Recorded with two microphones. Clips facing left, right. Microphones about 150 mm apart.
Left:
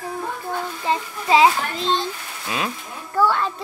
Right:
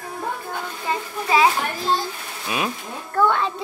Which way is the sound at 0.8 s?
25° left (ahead or behind).